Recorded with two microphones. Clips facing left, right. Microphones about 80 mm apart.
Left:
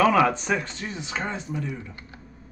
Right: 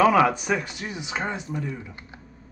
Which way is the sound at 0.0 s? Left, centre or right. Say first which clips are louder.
Right 1 dB; centre.